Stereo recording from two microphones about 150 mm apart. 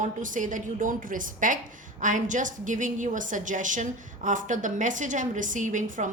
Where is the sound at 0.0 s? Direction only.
60° right (ahead or behind).